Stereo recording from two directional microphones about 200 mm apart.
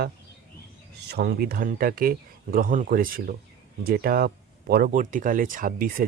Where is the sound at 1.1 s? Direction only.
55° right (ahead or behind).